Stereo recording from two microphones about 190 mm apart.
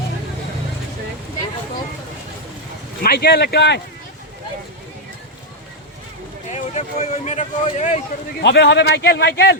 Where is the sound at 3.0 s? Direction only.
55° left (ahead or behind).